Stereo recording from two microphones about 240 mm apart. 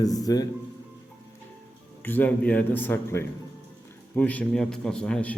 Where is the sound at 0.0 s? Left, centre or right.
Centre.